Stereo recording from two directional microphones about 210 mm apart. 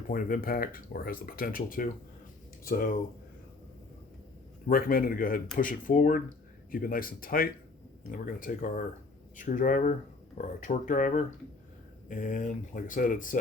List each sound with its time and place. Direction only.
0.1 s speech: 45° left (ahead or behind)
4.7 s speech: 45° left (ahead or behind)